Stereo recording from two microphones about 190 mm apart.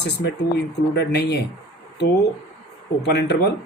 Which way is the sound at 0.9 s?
60° left (ahead or behind).